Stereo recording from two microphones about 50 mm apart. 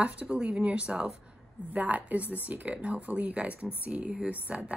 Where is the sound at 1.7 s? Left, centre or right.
Right.